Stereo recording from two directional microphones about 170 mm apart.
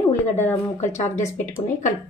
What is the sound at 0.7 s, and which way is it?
Speech, 45° left (ahead or behind).